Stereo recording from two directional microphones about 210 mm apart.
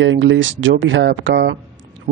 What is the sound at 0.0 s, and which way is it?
Speech, 60° right (ahead or behind).